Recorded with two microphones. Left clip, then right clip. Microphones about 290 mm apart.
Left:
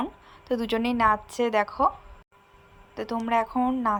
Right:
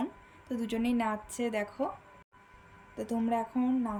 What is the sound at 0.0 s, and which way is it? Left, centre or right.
A woman's voice, centre.